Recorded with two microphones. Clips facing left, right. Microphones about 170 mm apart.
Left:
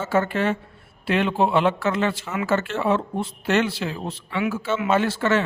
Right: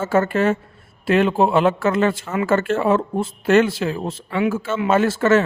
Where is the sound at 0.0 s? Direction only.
45° right (ahead or behind).